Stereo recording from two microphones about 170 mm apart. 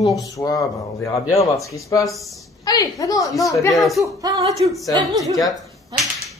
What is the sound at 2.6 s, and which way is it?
A woman's voice, 20° left (ahead or behind).